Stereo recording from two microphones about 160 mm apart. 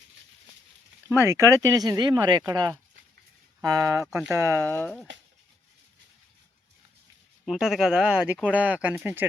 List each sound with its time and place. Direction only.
1.0 s speech: 15° right (ahead or behind)
4.6 s speech: 10° left (ahead or behind)
7.4 s speech: 5° right (ahead or behind)